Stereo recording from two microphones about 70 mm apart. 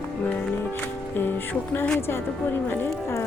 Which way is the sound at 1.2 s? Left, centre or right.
Left.